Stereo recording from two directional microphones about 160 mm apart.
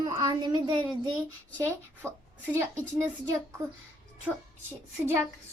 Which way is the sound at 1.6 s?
15° right (ahead or behind).